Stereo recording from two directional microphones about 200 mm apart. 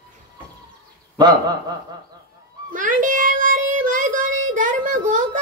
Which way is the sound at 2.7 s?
40° right (ahead or behind).